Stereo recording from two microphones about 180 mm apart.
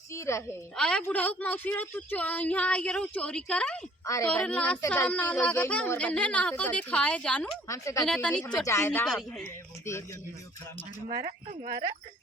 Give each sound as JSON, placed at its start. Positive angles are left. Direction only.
{"t": 0.1, "sound": "a woman's voice", "side_deg": 15}
{"t": 0.8, "sound": "a woman's voice", "side_deg": 5}
{"t": 7.7, "sound": "a woman's voice", "side_deg": 15}
{"t": 8.0, "sound": "speech", "side_deg": 5}
{"t": 8.6, "sound": "a woman's voice", "side_deg": 15}
{"t": 11.1, "sound": "speech", "side_deg": -50}